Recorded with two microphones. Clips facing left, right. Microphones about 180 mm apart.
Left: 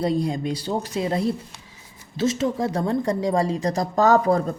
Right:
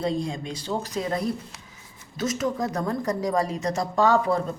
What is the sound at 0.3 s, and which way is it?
A woman's voice, 35° left (ahead or behind).